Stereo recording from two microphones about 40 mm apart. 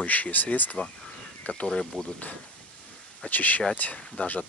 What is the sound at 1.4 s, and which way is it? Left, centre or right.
Speech, left.